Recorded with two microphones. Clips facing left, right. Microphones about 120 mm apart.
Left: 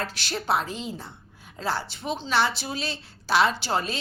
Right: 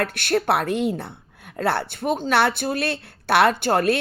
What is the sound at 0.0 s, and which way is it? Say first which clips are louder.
A woman's voice: right 9 dB; 55° right (ahead or behind).